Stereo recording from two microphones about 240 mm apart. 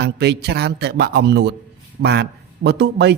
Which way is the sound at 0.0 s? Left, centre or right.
Right.